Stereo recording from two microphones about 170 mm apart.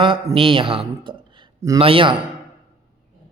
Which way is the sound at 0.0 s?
30° right (ahead or behind).